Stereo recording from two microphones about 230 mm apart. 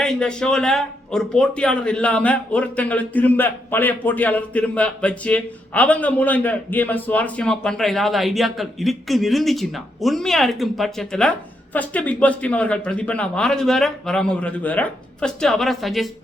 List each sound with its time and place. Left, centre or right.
0.0 s speech: centre